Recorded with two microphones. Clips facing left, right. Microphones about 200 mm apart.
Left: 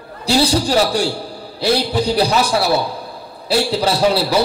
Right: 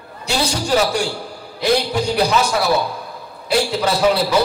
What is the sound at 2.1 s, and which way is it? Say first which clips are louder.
A man's voice: even; 35° left (ahead or behind).